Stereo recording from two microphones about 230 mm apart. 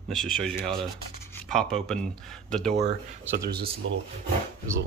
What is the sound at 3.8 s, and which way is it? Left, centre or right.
Speech, right.